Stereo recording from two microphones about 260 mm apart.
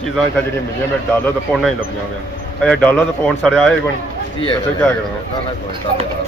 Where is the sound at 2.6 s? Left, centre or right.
Centre.